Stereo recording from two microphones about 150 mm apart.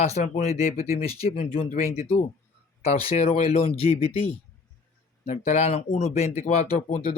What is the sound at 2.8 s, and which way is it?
Speech, 40° left (ahead or behind).